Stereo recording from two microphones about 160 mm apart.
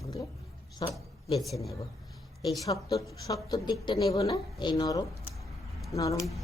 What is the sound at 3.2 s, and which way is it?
Speech, 20° left (ahead or behind).